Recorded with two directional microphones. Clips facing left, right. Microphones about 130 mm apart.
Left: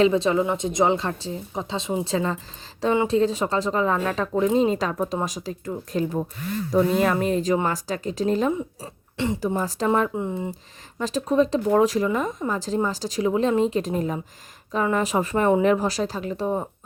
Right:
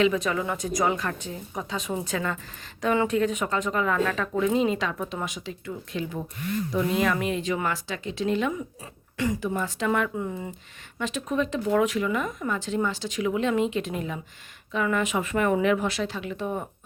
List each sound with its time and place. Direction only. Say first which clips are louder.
0.0 s speech: left 5 dB; 30° left (ahead or behind)
10.5 s speech: left 5 dB; 35° left (ahead or behind)